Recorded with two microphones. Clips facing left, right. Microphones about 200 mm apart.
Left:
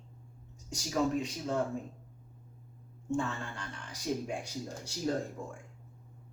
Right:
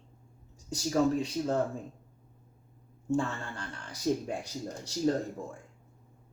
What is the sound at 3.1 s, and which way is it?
Speech, 35° right (ahead or behind).